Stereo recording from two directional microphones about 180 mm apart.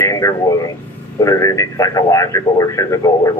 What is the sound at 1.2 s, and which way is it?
A man's voice, 20° left (ahead or behind).